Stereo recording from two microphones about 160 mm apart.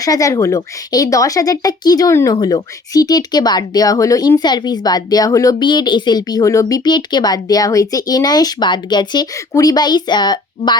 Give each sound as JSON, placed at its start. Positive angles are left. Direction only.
{"t": 0.0, "sound": "speech", "side_deg": 20}